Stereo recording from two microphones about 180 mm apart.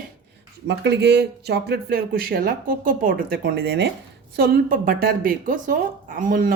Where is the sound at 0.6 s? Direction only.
70° right (ahead or behind).